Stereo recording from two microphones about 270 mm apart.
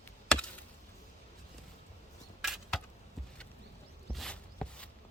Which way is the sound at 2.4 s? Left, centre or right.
Centre.